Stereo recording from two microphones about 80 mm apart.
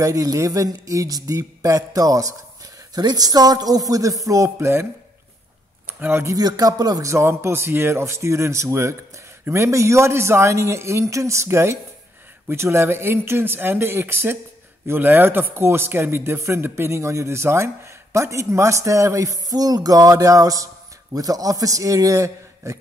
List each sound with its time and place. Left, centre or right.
0.0 s a man's voice: right
5.9 s speech: right
6.2 s a man's voice: right
7.1 s a man's voice: right